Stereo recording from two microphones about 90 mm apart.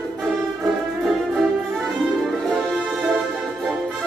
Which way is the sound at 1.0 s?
Centre (ahead or behind).